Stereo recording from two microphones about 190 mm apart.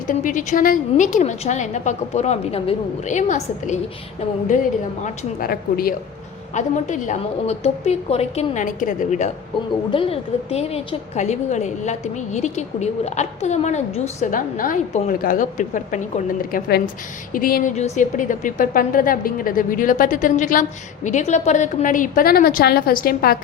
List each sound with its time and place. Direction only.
0.1 s a woman's voice: 45° left (ahead or behind)
5.0 s a woman's voice: 50° left (ahead or behind)
6.5 s a woman's voice: 40° left (ahead or behind)